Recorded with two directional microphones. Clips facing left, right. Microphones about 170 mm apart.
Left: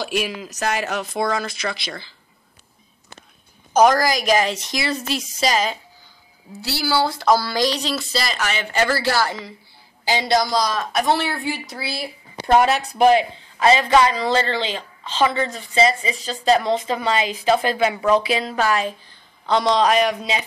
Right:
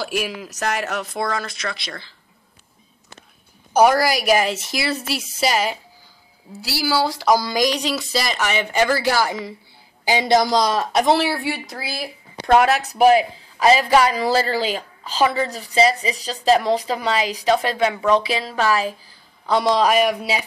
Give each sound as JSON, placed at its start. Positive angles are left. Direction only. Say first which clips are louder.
{"t": 0.0, "sound": "a man's voice", "louder": "left 1 dB", "side_deg": -5}
{"t": 3.7, "sound": "speech", "louder": "even", "side_deg": -10}
{"t": 12.6, "sound": "a man's voice", "louder": "right 1 dB", "side_deg": 0}